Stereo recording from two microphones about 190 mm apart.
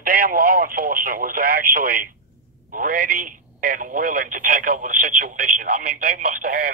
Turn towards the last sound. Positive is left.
turn(degrees=-50)  # may be behind; listen again after turning